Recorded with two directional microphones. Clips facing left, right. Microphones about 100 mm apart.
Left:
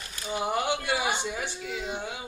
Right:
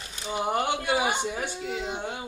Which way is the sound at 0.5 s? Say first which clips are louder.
Right 3 dB; 45° right (ahead or behind).